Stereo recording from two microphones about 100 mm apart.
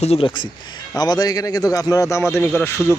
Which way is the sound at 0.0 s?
75° left (ahead or behind).